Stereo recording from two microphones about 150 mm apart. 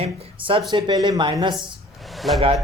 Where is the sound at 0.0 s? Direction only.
35° right (ahead or behind).